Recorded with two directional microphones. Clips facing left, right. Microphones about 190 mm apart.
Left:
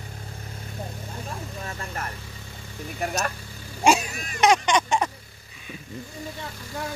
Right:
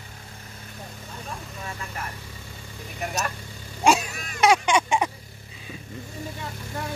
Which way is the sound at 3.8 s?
Centre (ahead or behind).